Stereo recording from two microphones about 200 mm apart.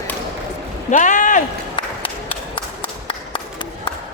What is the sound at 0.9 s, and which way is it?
Speech, 40° left (ahead or behind).